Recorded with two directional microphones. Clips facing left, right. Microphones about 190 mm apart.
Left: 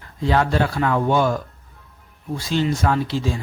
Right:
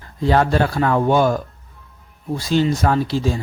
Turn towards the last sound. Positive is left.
turn(degrees=-40)  # may be behind; listen again after turning